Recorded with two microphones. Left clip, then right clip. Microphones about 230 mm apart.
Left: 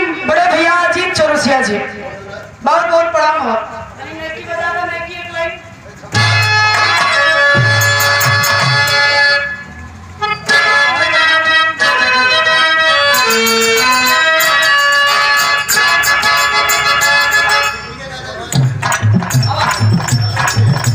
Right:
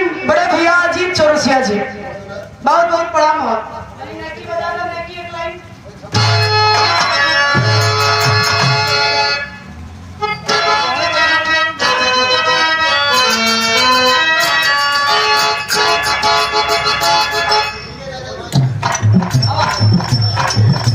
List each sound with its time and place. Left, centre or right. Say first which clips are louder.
0.3 s a sound: left 1 dB; left
6.1 s music: left 2 dB; left
10.2 s vehicle: left 3 dB; left
11.1 s music: left 2 dB; left